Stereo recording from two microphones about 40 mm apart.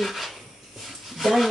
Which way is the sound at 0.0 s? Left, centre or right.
Centre.